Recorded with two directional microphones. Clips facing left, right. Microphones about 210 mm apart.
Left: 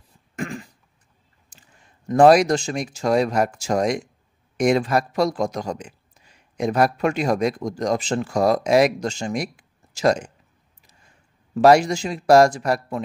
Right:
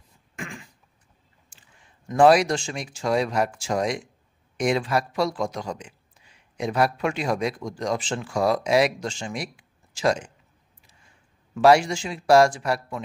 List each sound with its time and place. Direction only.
0.4 s throat clearing: 40° left (ahead or behind)
1.5 s a sound: 40° left (ahead or behind)
2.0 s a man's voice: 40° left (ahead or behind)
11.5 s speech: 40° left (ahead or behind)